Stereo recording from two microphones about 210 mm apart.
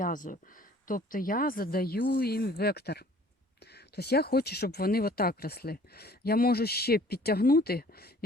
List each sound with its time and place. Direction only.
0.0 s speech: 40° left (ahead or behind)